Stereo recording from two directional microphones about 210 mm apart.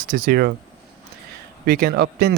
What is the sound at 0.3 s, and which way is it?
Speech, 50° right (ahead or behind).